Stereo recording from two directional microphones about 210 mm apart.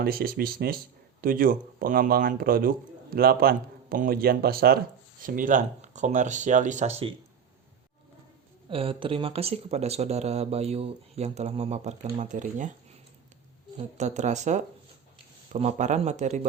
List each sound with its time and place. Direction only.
0.0 s a man's voice: 45° right (ahead or behind)
8.7 s speech: 25° right (ahead or behind)
13.7 s speech: 35° right (ahead or behind)